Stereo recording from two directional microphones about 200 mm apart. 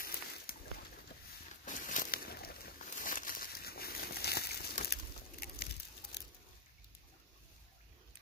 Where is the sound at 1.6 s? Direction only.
40° left (ahead or behind).